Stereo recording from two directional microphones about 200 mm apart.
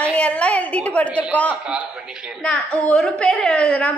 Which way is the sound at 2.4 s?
5° left (ahead or behind).